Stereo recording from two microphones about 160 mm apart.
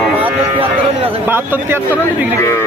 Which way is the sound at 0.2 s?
35° right (ahead or behind).